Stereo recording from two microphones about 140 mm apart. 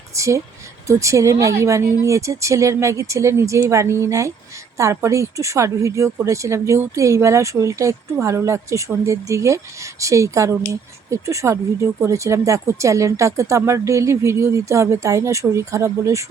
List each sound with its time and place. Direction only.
0.2 s speech: 20° right (ahead or behind)